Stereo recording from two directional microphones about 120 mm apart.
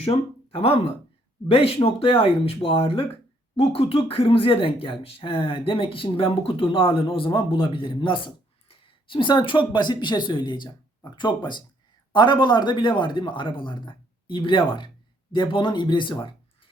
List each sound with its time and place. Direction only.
1.5 s speech: 50° left (ahead or behind)